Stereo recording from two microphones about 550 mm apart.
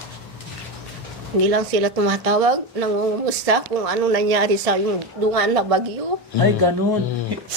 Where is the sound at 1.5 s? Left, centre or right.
Right.